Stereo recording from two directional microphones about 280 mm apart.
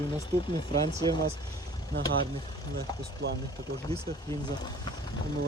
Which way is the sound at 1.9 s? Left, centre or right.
Right.